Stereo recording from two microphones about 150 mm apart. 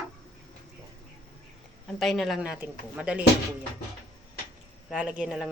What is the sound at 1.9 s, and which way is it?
Speech, centre (ahead or behind).